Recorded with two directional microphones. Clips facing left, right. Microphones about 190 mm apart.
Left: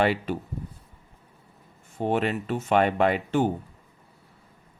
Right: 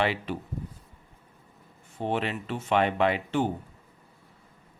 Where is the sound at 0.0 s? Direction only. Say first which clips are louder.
Left 4 dB; 45° left (ahead or behind).